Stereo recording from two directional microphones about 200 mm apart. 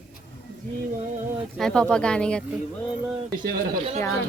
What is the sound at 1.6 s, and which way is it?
Speech, 5° left (ahead or behind).